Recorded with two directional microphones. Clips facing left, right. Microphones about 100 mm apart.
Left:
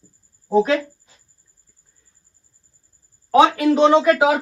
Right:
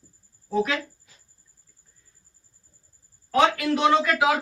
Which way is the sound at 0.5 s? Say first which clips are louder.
Left 8 dB; 30° left (ahead or behind).